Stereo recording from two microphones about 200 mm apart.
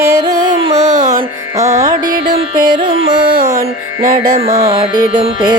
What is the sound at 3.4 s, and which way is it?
Music, 40° right (ahead or behind).